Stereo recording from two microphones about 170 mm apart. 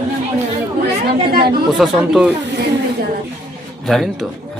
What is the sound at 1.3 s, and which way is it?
Speech, 65° right (ahead or behind).